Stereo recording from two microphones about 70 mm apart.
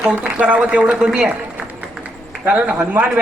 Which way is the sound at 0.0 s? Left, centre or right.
Centre.